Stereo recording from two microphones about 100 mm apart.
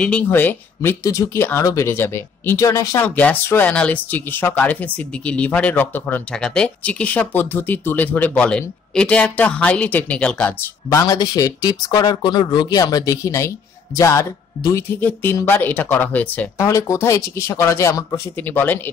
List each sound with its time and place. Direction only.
0.3 s speech: 20° left (ahead or behind)
3.0 s speech: 15° left (ahead or behind)
6.3 s speech: 10° left (ahead or behind)
10.9 s speech: 35° left (ahead or behind); by 16.4 s 15° left (ahead or behind)
16.5 s speech: 30° left (ahead or behind)